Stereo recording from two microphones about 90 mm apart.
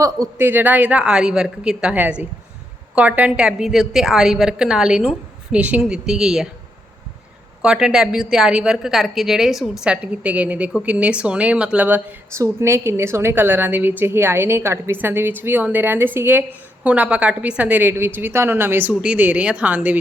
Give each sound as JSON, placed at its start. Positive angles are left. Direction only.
{"t": 0.3, "sound": "a woman's voice", "side_deg": -25}
{"t": 7.6, "sound": "a woman's voice", "side_deg": -10}
{"t": 12.3, "sound": "a woman's voice", "side_deg": -30}